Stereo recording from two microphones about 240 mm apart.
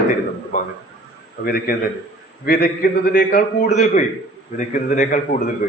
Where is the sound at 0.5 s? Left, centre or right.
Left.